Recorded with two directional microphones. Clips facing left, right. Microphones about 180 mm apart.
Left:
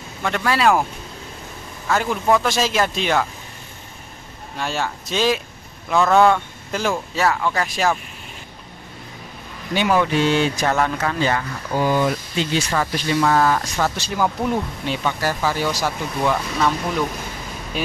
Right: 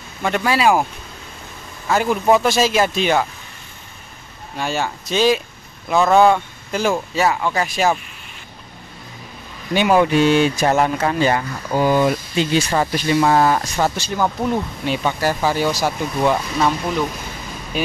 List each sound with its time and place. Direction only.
0.2 s speech: 10° right (ahead or behind)
1.9 s speech: 10° right (ahead or behind)
2.4 s speech: 5° right (ahead or behind)
4.6 s speech: 5° right (ahead or behind)
9.8 s speech: 15° right (ahead or behind)
10.6 s speech: 25° right (ahead or behind)
13.9 s speech: centre (ahead or behind)
14.9 s speech: 15° right (ahead or behind)
17.7 s speech: centre (ahead or behind)